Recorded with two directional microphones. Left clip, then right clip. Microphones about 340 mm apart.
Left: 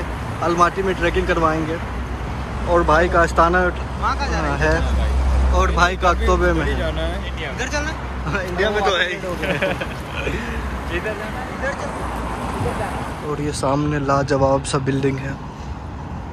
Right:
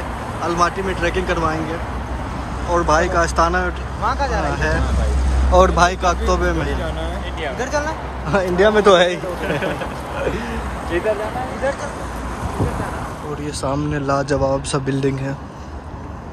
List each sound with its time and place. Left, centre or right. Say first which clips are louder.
0.6 s speech: left 1 dB; centre
2.7 s speech: left 1 dB; centre
4.0 s speech: right 2 dB; right
5.5 s a man's voice: right 5 dB; centre
7.4 s a man's voice: right 3 dB; centre
10.9 s speech: right 6 dB; right
13.6 s a man's voice: left 1 dB; centre